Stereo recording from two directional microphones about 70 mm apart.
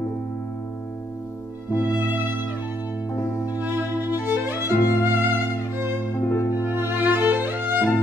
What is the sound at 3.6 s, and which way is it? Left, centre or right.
Music, right.